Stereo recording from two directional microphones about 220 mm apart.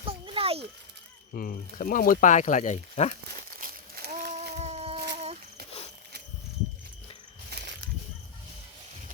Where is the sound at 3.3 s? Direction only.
40° right (ahead or behind).